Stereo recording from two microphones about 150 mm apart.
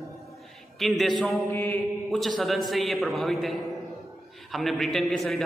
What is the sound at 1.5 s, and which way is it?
Mantra, 15° left (ahead or behind).